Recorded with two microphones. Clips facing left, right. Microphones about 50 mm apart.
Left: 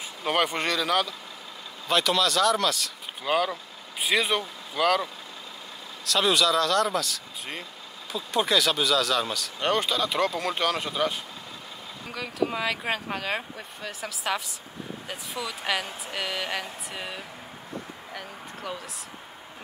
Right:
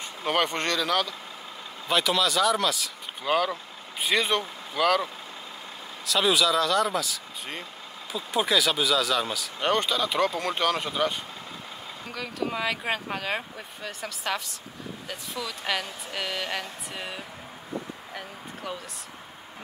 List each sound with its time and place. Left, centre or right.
0.2 s speech: centre
6.0 s speech: centre
15.0 s speech: centre
16.2 s speech: centre